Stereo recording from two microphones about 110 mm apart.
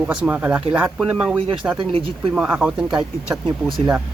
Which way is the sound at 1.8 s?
50° right (ahead or behind).